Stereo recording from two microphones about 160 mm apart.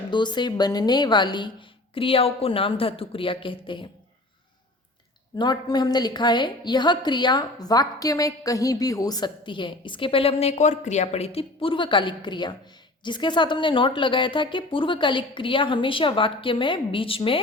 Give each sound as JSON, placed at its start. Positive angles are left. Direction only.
{"t": 0.1, "sound": "a woman's voice", "side_deg": 30}
{"t": 5.4, "sound": "a woman's voice", "side_deg": 25}